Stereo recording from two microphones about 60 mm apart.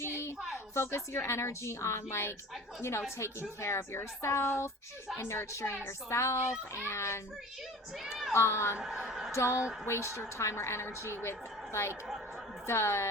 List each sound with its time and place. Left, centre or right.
0.0 s a woman's voice: left
3.6 s a woman's voice: left
8.3 s a woman's voice: left
8.8 s a woman's voice: centre
9.3 s a woman's voice: left